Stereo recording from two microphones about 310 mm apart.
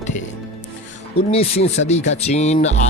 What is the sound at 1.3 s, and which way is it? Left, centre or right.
Speech, centre.